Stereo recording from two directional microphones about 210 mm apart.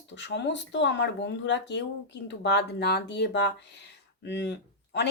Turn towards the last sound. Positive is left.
turn(degrees=55)  # may be behind; listen again after turning